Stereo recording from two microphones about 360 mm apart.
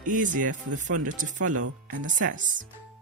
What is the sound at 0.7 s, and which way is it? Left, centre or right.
Speech, right.